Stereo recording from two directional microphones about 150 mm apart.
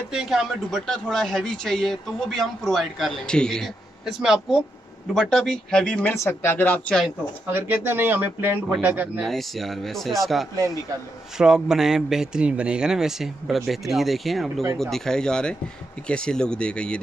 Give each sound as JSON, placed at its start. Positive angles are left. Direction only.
{"t": 0.1, "sound": "a man's voice", "side_deg": -5}
{"t": 7.4, "sound": "speech", "side_deg": -15}
{"t": 9.2, "sound": "a man's voice", "side_deg": 0}
{"t": 10.5, "sound": "a man's voice", "side_deg": -25}
{"t": 11.3, "sound": "a man's voice", "side_deg": -5}